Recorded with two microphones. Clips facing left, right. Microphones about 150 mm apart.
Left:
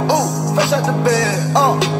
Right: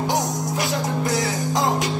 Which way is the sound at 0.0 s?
90° left.